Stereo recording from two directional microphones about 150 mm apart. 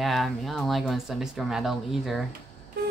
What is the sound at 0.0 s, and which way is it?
Speech, centre (ahead or behind).